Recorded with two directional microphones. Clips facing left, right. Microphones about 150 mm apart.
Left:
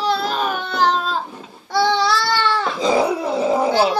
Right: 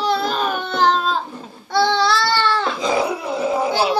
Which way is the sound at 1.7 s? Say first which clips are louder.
Even; 10° left (ahead or behind).